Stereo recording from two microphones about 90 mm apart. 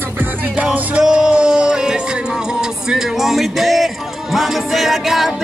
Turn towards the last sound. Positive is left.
turn(degrees=0)  # may be behind; listen again after turning